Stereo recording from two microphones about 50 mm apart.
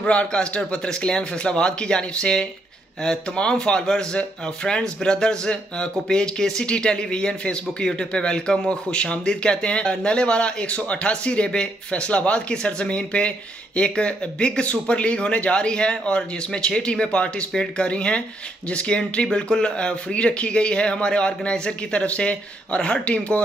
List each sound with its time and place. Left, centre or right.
0.0 s speech: left